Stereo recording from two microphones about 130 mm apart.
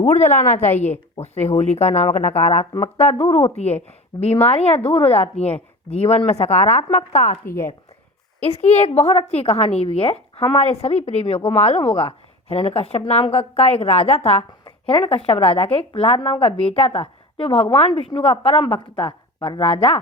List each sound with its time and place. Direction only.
0.0 s speech: 60° left (ahead or behind)
0.7 s a woman's voice: 15° left (ahead or behind)
1.2 s a woman's voice: 55° left (ahead or behind)
7.4 s a woman's voice: 20° left (ahead or behind)
8.4 s a woman's voice: 55° left (ahead or behind)
14.6 s a woman's voice: 45° left (ahead or behind)